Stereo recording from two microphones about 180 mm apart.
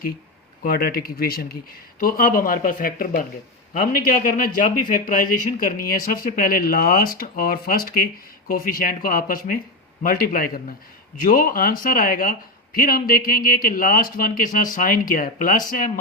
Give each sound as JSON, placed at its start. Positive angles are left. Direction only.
{"t": 0.6, "sound": "speech", "side_deg": 55}